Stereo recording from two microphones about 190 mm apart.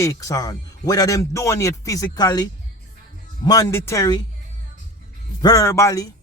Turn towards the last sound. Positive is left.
turn(degrees=15)  # may be behind; listen again after turning